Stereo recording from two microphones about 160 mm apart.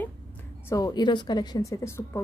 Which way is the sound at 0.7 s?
20° left (ahead or behind).